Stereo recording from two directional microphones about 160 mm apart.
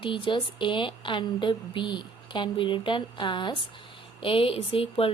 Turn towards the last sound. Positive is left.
turn(degrees=35)  # may be behind; listen again after turning